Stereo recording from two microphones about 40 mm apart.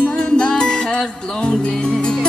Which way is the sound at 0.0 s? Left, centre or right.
Left.